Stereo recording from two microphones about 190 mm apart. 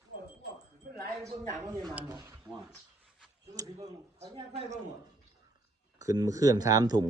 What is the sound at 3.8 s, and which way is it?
A man's voice, 35° right (ahead or behind).